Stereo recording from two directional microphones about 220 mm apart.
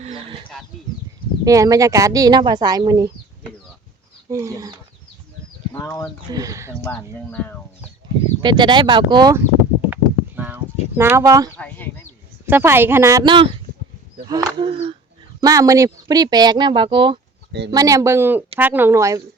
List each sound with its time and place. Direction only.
0.0 s livestock: 25° right (ahead or behind)
1.5 s speech: 15° right (ahead or behind)
4.3 s speech: 15° right (ahead or behind)
5.8 s speech: 15° left (ahead or behind)
6.3 s speech: 15° right (ahead or behind)
6.8 s speech: 10° left (ahead or behind)
8.4 s speech: 20° right (ahead or behind)
9.9 s a sound: 10° right (ahead or behind)
11.5 s chicken: 5° left (ahead or behind)
12.5 s speech: 10° right (ahead or behind)